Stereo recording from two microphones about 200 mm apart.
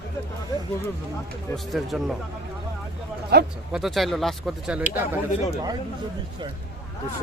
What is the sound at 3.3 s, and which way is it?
Speech, 55° right (ahead or behind).